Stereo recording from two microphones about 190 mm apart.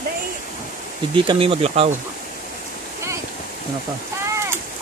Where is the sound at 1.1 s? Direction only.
25° right (ahead or behind).